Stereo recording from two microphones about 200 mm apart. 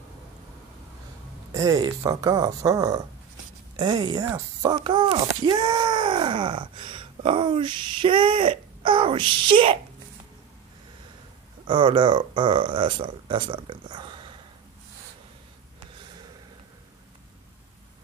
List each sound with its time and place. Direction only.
1.5 s speech: 20° right (ahead or behind)
11.6 s speech: 25° right (ahead or behind)